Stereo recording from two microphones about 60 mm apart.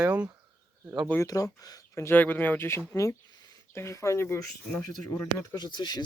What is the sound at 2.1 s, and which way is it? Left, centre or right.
Speech, left.